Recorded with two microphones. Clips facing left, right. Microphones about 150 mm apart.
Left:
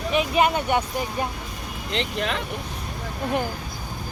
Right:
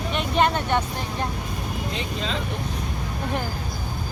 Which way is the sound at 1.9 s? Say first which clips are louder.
Left 6 dB; 65° left (ahead or behind).